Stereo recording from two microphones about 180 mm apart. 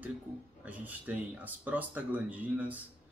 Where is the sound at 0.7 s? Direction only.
10° right (ahead or behind).